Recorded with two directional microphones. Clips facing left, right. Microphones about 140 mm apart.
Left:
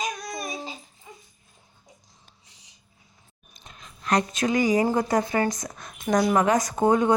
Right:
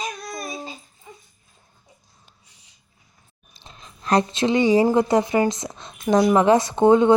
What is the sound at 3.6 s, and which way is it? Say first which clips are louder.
Speech: right 2 dB; 30° right (ahead or behind).